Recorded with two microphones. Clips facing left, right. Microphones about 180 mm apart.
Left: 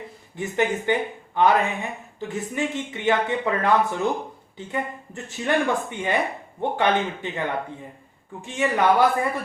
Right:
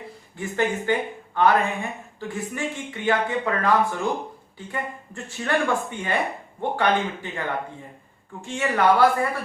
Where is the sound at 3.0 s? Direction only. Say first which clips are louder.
Left 1 dB; 20° left (ahead or behind).